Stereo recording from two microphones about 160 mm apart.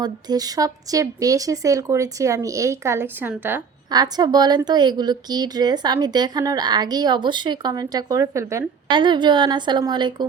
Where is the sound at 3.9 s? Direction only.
25° right (ahead or behind).